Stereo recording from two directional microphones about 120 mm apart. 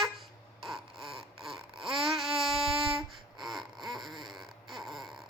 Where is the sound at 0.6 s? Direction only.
Centre (ahead or behind).